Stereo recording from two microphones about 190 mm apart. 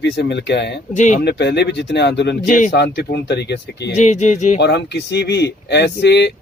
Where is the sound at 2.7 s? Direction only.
60° left (ahead or behind).